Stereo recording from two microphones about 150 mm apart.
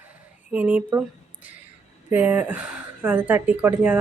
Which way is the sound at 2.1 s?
10° right (ahead or behind).